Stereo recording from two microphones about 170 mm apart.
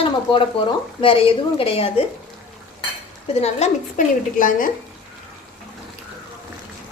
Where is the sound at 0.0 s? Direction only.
30° left (ahead or behind).